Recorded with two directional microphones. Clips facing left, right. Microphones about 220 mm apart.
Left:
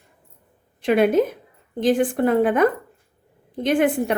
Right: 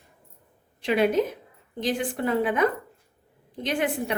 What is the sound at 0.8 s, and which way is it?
A woman's voice, 50° left (ahead or behind).